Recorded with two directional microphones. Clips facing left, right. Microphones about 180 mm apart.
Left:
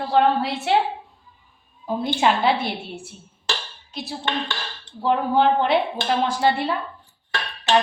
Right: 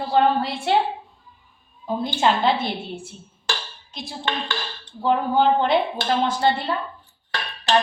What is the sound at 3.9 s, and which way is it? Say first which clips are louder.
A woman's voice: left 1 dB; 5° left (ahead or behind).